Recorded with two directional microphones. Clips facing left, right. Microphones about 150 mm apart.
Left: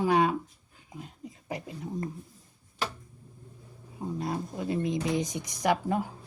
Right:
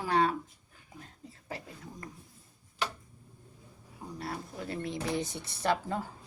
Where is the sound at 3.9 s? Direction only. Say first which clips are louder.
Left 7 dB; 20° left (ahead or behind).